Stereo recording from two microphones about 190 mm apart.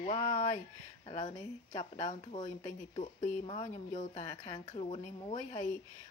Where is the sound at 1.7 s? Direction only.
35° left (ahead or behind).